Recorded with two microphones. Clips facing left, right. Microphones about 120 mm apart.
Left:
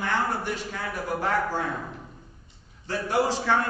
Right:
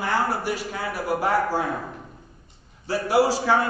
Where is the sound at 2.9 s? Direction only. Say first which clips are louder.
Right 5 dB; 10° right (ahead or behind).